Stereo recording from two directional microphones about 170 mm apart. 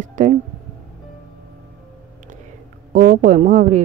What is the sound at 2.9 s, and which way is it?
Speech, 50° right (ahead or behind).